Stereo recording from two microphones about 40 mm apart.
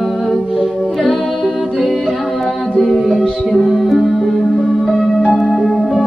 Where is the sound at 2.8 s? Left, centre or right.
Centre.